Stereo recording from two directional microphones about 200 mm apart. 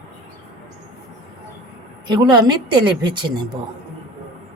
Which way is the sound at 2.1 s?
20° right (ahead or behind).